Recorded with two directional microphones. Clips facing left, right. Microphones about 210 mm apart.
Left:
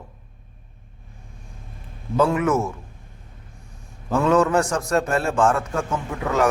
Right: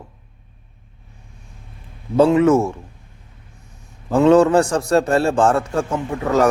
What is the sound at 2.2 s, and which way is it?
Speech, 30° right (ahead or behind).